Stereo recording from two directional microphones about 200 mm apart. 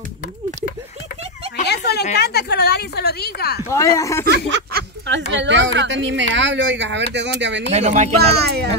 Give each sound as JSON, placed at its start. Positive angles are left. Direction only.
{"t": 1.6, "sound": "a sound", "side_deg": 55}
{"t": 2.1, "sound": "a woman's voice", "side_deg": 55}
{"t": 3.6, "sound": "speech", "side_deg": 15}
{"t": 4.3, "sound": "speech", "side_deg": -60}
{"t": 7.7, "sound": "speech", "side_deg": -35}
{"t": 8.2, "sound": "speech", "side_deg": -55}